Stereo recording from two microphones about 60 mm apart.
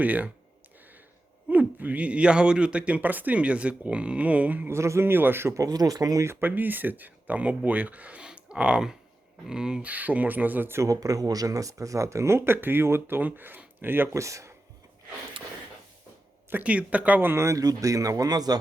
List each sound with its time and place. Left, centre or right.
0.0 s speech: right
1.5 s speech: right
4.7 s speech: right
5.5 s speech: right
6.4 s speech: right; by 9.8 s centre
9.8 s speech: right
10.8 s speech: right
14.1 s speech: right
16.5 s speech: right
17.3 s speech: right
17.6 s speech: right